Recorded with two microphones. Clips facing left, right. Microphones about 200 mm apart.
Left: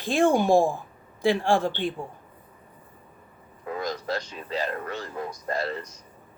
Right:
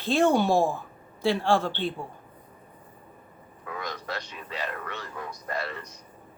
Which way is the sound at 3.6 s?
35° left (ahead or behind).